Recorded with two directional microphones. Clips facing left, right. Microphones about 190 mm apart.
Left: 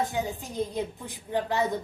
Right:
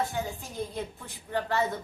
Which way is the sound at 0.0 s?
15° left (ahead or behind).